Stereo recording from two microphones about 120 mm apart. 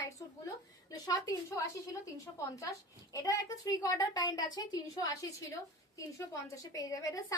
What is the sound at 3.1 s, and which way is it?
A woman's voice, 30° left (ahead or behind).